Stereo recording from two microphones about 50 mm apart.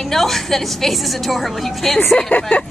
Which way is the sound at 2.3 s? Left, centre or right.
Left.